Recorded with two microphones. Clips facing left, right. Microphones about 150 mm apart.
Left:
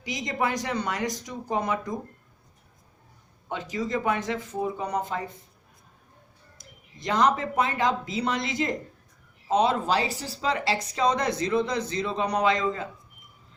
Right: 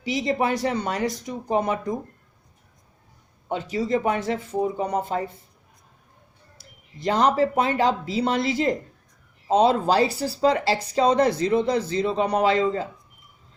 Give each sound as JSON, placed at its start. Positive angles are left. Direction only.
{"t": 0.0, "sound": "speech", "side_deg": -30}
{"t": 3.5, "sound": "speech", "side_deg": -30}
{"t": 6.6, "sound": "speech", "side_deg": -30}